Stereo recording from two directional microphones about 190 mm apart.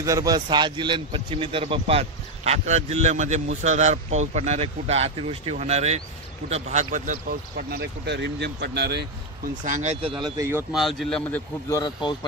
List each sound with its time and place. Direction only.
0.0 s a man's voice: 15° right (ahead or behind); by 9.0 s 60° right (ahead or behind)
9.7 s speech: 40° right (ahead or behind); by 10.6 s 15° right (ahead or behind)
10.7 s speech: centre (ahead or behind)
11.7 s speech: 20° left (ahead or behind)